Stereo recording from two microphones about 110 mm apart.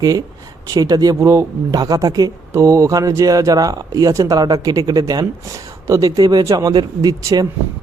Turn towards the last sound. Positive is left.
turn(degrees=-35)  # may be behind; listen again after turning